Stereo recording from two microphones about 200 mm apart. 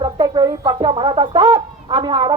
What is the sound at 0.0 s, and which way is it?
Speech, 20° right (ahead or behind).